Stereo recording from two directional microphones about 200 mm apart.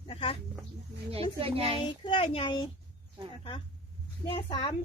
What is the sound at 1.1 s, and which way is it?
Speech, 30° right (ahead or behind).